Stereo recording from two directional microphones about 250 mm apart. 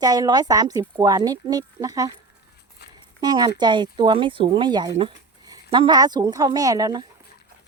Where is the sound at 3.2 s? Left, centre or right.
Centre.